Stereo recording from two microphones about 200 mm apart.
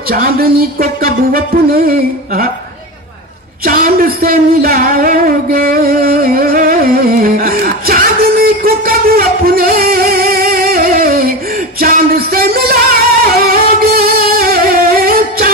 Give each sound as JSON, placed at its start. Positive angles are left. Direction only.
{"t": 0.1, "sound": "music", "side_deg": -50}
{"t": 3.6, "sound": "a sound", "side_deg": -50}
{"t": 11.8, "sound": "music", "side_deg": -50}